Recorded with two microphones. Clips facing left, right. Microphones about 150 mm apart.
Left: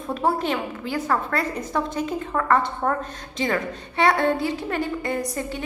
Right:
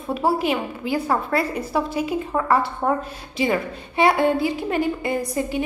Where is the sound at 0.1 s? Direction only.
5° right (ahead or behind).